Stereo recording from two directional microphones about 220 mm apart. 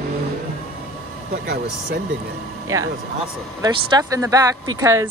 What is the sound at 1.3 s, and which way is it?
Speech, 50° right (ahead or behind).